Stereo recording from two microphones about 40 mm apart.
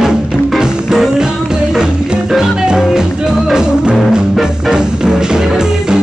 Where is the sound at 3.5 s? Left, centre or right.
Right.